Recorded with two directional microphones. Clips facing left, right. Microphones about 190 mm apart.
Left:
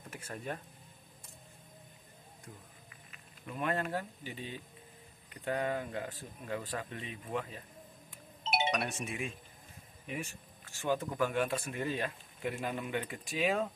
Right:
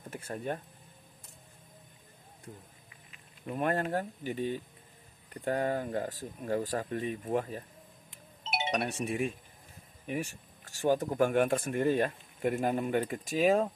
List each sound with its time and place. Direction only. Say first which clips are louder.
0.1 s speech: right 5 dB; 30° right (ahead or behind)
3.5 s speech: right 4 dB; 45° right (ahead or behind)
8.6 s speech: right 3 dB; 30° right (ahead or behind)